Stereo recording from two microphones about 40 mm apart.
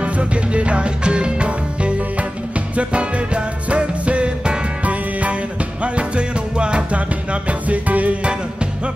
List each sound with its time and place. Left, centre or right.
0.0 s music: right
7.4 s music: right